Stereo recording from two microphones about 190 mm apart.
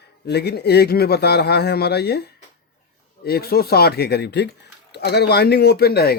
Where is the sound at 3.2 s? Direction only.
55° left (ahead or behind).